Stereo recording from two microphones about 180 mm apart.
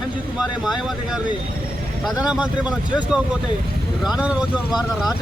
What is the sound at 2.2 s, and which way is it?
Speech, 5° right (ahead or behind).